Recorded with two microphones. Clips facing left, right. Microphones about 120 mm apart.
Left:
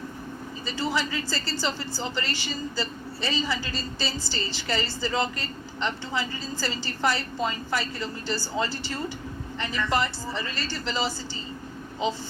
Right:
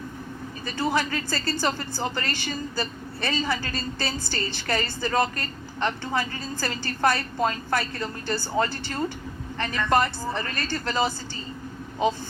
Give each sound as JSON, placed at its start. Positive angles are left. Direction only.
{"t": 0.6, "sound": "a man's voice", "side_deg": -55}